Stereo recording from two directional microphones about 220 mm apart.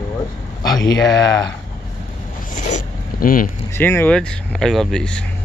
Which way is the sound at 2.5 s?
35° left (ahead or behind).